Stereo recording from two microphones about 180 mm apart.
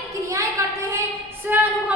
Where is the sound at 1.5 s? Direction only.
10° right (ahead or behind).